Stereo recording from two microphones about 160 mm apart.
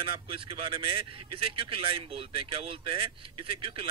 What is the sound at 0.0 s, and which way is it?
Speech, 35° right (ahead or behind).